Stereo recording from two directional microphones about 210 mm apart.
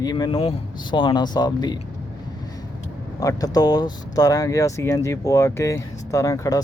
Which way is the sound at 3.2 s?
15° left (ahead or behind).